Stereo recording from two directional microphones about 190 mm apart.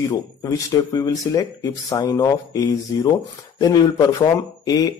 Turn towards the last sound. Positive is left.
turn(degrees=20)  # may be behind; listen again after turning